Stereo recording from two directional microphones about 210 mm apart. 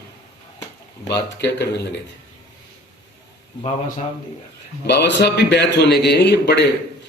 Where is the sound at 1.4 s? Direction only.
55° left (ahead or behind).